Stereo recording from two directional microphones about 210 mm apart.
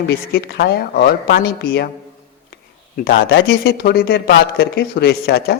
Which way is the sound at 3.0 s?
50° left (ahead or behind).